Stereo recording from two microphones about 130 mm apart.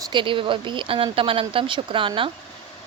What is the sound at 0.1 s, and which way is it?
Speech, 40° right (ahead or behind).